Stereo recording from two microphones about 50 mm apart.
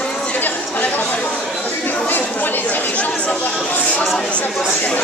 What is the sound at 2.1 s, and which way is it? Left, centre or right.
Speech, left.